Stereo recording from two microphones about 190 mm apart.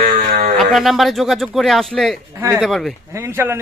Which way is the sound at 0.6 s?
Centre (ahead or behind).